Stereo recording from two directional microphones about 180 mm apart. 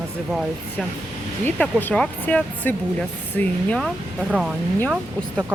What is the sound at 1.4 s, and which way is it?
Speech, 10° left (ahead or behind).